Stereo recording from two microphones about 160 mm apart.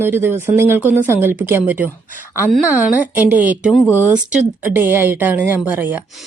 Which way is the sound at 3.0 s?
10° right (ahead or behind).